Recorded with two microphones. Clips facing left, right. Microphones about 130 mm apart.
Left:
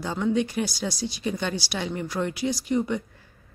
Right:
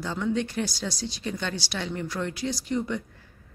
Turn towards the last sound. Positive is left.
turn(degrees=15)  # may be behind; listen again after turning